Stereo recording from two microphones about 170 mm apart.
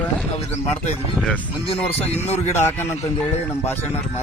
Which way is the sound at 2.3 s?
10° left (ahead or behind).